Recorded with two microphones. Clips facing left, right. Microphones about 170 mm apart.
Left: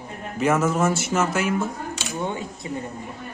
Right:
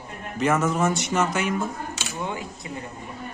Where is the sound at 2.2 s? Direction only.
25° left (ahead or behind).